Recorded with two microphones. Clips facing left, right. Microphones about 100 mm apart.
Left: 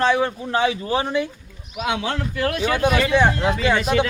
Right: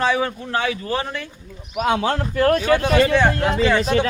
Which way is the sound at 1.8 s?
40° right (ahead or behind).